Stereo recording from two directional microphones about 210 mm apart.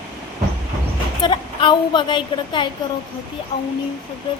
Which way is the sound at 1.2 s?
20° left (ahead or behind).